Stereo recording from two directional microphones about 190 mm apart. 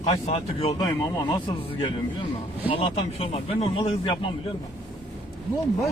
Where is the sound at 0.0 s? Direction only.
30° left (ahead or behind).